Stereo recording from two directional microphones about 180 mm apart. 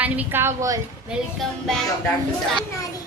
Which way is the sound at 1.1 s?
Centre (ahead or behind).